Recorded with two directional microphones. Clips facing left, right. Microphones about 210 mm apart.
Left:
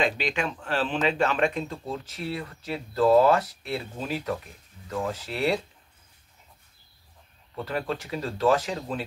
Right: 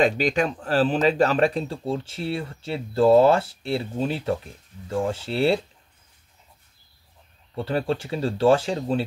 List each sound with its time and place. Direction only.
0.0 s speech: 40° right (ahead or behind)
7.5 s speech: 30° right (ahead or behind)